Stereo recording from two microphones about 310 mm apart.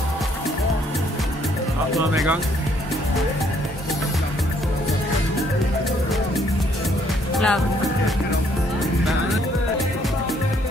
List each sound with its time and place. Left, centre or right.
7.3 s speech: centre